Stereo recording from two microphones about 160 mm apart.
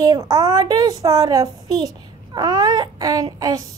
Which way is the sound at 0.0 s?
20° right (ahead or behind).